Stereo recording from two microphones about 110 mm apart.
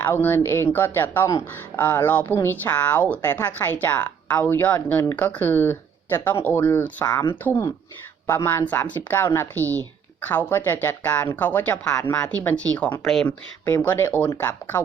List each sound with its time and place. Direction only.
0.0 s speech: 20° left (ahead or behind)